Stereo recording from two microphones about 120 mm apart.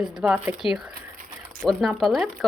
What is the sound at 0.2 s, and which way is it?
Speech, 10° right (ahead or behind).